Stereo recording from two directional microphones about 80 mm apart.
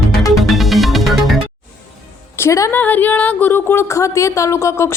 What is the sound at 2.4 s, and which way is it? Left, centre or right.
Speech, left.